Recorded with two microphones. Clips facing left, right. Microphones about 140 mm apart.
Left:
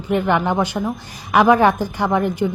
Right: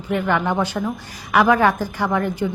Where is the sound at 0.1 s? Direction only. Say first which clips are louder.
Left 2 dB; 20° left (ahead or behind).